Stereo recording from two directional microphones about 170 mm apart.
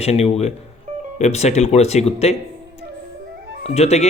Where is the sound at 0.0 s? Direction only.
40° left (ahead or behind).